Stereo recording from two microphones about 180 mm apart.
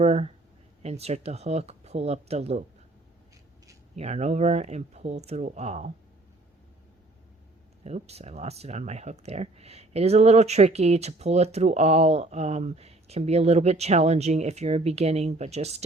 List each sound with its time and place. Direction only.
0.0 s speech: 35° right (ahead or behind)
3.9 s speech: 35° right (ahead or behind)
7.9 s speech: 35° right (ahead or behind)